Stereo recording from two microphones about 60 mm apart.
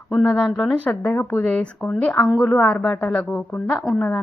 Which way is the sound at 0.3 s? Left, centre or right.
Centre.